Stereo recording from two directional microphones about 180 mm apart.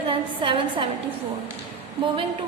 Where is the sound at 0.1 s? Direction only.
30° right (ahead or behind).